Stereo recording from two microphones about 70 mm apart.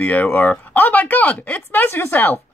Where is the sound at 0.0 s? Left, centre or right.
Left.